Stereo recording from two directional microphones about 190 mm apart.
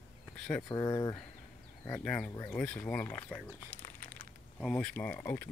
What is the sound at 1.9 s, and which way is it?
Speech, 5° left (ahead or behind).